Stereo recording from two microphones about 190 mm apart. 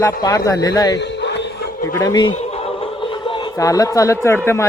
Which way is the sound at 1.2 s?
65° left (ahead or behind).